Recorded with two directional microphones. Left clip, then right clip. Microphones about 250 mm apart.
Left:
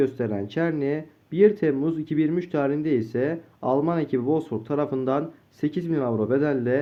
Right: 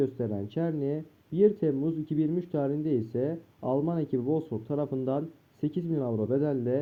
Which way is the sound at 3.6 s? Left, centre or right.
Centre.